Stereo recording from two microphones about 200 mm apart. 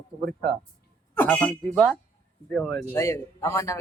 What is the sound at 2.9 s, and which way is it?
Speech, 15° left (ahead or behind).